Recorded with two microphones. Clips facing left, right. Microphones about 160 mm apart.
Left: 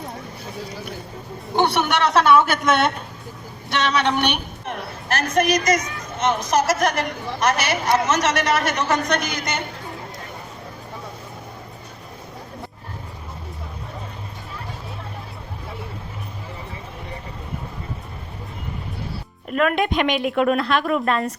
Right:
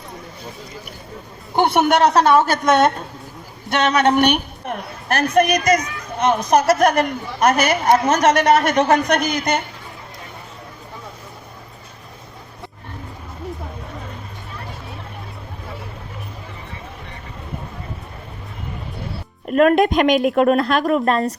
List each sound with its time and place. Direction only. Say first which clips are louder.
1.6 s speech: right 5 dB; 50° right (ahead or behind)
5.1 s speech: right 3 dB; 60° right (ahead or behind)
19.5 s a woman's voice: right 6 dB; 40° right (ahead or behind)